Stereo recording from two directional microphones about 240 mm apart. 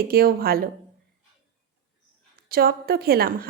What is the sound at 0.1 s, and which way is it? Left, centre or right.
Speech, right.